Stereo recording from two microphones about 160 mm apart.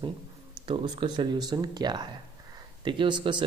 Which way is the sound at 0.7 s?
30° right (ahead or behind).